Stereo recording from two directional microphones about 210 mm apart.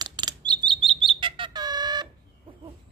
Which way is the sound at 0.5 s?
20° right (ahead or behind).